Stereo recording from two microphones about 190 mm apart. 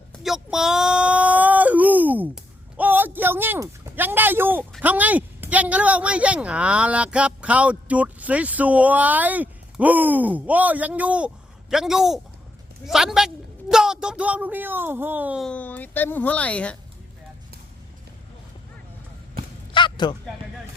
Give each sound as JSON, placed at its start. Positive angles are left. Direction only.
{"t": 0.1, "sound": "whimper", "side_deg": 0}
{"t": 4.8, "sound": "a woman's voice", "side_deg": -10}
{"t": 15.4, "sound": "a woman's voice", "side_deg": 10}
{"t": 19.7, "sound": "a sound", "side_deg": 25}